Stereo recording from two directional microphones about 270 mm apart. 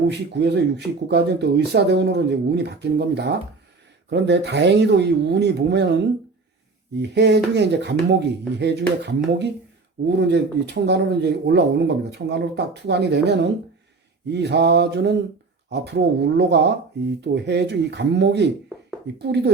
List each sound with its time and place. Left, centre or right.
0.1 s speech: right
7.1 s speech: right